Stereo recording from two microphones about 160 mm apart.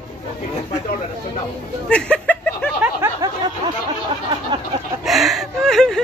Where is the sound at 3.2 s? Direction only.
20° right (ahead or behind).